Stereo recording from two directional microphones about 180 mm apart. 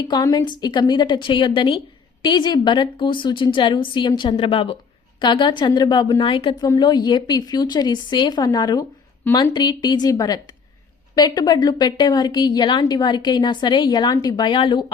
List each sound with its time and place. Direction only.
0.0 s a woman's voice: 20° left (ahead or behind)